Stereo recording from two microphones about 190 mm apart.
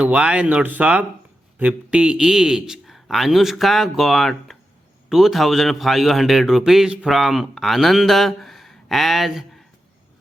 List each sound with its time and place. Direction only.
0.0 s a man's voice: 5° right (ahead or behind)